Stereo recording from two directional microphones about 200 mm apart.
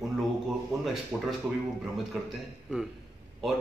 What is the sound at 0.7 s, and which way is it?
Speech, centre (ahead or behind).